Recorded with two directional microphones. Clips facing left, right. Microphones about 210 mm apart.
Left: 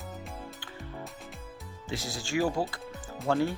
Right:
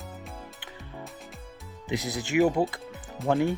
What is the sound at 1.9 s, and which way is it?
Speech, 20° right (ahead or behind).